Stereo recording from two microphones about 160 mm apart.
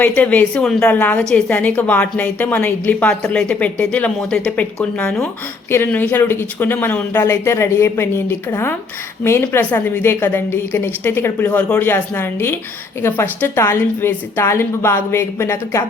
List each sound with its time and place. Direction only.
0.0 s a woman's voice: 10° left (ahead or behind)